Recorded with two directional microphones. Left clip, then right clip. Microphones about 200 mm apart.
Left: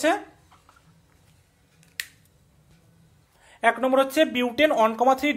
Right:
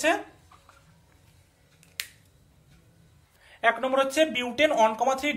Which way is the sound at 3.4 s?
45° left (ahead or behind).